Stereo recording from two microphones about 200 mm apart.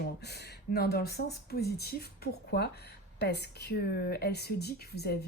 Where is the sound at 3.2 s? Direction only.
55° left (ahead or behind).